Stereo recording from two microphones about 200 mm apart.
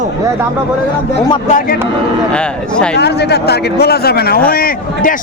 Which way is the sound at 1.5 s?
45° left (ahead or behind).